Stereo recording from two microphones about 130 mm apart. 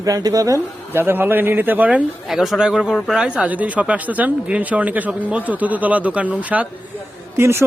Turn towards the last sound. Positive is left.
turn(degrees=-20)  # may be behind; listen again after turning